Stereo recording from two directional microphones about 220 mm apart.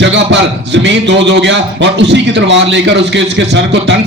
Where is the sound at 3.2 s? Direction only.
55° right (ahead or behind).